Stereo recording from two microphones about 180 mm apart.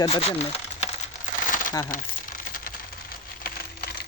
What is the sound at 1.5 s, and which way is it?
Crumpling, 50° left (ahead or behind).